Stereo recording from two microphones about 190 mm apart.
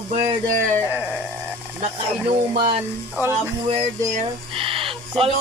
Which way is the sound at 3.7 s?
30° right (ahead or behind).